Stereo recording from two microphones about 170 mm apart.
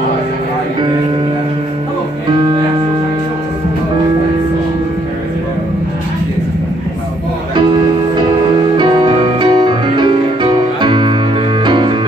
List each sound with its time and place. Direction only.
8.7 s music: 25° right (ahead or behind)